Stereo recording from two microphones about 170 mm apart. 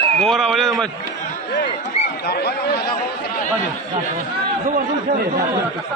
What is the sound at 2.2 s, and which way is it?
Speech, 70° left (ahead or behind).